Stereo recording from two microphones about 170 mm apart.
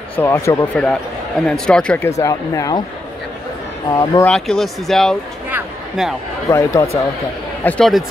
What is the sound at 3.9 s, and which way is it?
Speech, 20° left (ahead or behind).